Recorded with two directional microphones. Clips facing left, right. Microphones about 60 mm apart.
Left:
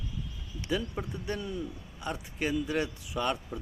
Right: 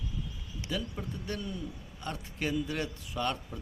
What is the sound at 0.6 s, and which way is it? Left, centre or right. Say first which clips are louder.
A man's voice: left 4 dB; centre.